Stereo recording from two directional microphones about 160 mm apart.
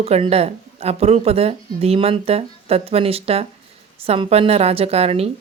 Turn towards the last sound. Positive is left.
turn(degrees=-40)  # may be behind; listen again after turning